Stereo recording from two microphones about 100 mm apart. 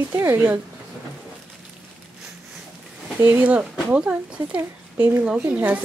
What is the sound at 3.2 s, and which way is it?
Speech, 20° right (ahead or behind).